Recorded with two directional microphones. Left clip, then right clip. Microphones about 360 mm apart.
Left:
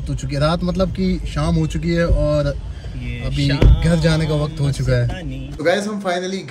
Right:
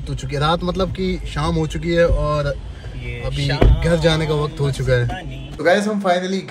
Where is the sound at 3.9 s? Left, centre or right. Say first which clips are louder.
Right 3 dB; centre.